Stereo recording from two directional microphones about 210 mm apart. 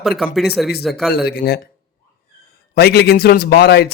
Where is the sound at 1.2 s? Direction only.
50° left (ahead or behind).